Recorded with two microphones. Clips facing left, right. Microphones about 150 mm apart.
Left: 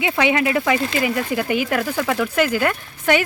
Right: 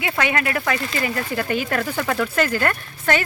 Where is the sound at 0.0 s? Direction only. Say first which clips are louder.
Left 4 dB; 15° left (ahead or behind).